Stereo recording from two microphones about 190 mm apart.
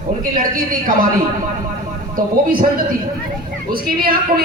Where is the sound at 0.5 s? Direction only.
45° right (ahead or behind).